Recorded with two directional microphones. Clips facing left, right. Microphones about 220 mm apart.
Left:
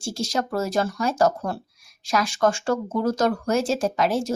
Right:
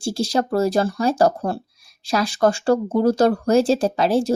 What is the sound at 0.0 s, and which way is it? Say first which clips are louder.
Speech: right 5 dB; 35° right (ahead or behind).